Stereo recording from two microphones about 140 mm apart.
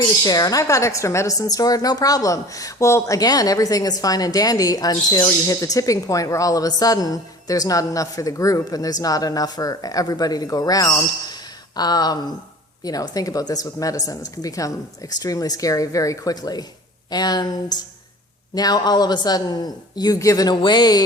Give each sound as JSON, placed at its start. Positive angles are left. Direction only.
{"t": 0.3, "sound": "a woman's voice", "side_deg": 25}